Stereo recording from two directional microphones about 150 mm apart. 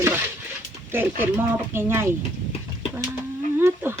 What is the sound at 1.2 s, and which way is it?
Speech, 15° right (ahead or behind).